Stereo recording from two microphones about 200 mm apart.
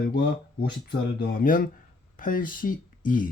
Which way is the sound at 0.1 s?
50° left (ahead or behind).